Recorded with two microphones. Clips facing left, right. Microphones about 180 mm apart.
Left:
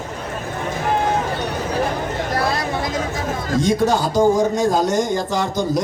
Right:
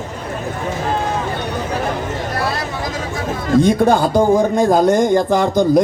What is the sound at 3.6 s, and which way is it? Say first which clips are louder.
Speech: right 3 dB; 55° right (ahead or behind).